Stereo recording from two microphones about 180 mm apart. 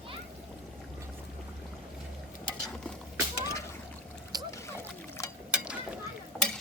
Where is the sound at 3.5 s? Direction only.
15° left (ahead or behind).